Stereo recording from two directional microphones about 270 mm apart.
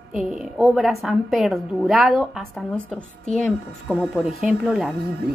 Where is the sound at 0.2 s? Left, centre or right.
Centre.